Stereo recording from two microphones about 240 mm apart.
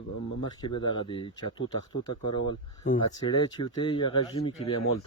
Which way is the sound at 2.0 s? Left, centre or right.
Left.